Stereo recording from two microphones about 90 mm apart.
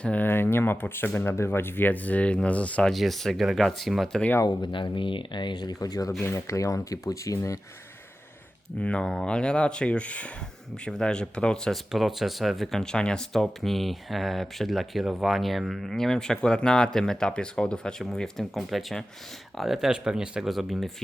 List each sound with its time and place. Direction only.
0.0 s speech: 20° left (ahead or behind)
2.9 s speech: centre (ahead or behind)
4.4 s speech: 60° left (ahead or behind); by 7.6 s 35° left (ahead or behind)
8.8 s speech: 10° left (ahead or behind)